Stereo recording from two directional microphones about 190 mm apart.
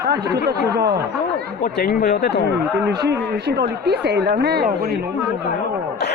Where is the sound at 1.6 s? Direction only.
50° left (ahead or behind).